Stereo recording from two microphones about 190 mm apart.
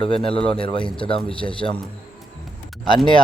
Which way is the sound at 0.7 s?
25° left (ahead or behind).